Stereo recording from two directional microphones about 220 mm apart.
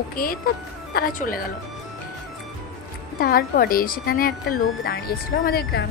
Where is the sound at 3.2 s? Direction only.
40° left (ahead or behind).